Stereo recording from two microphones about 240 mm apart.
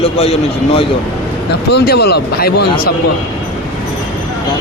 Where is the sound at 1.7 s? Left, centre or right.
Left.